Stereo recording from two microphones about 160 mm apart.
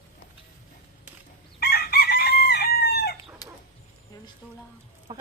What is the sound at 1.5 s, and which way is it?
Chicken, 75° left (ahead or behind).